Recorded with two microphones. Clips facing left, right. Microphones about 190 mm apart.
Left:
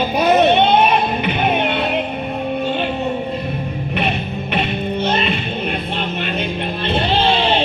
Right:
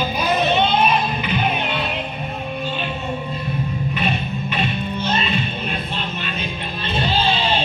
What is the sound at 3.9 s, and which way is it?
Music, 65° left (ahead or behind).